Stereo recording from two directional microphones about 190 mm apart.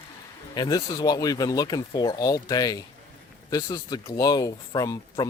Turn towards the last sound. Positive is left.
turn(degrees=20)  # may be behind; listen again after turning